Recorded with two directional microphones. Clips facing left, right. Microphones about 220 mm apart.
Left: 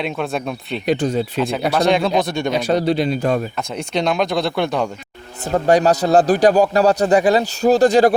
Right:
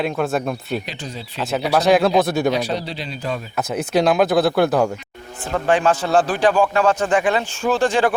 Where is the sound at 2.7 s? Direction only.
50° left (ahead or behind).